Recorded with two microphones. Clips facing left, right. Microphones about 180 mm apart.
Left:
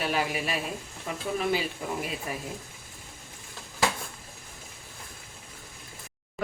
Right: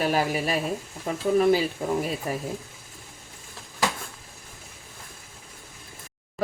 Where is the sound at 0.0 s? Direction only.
40° right (ahead or behind).